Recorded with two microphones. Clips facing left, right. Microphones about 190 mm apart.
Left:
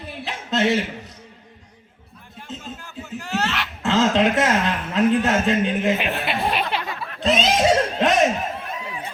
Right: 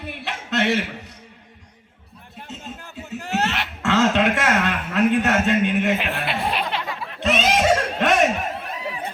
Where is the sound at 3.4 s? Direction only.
55° right (ahead or behind).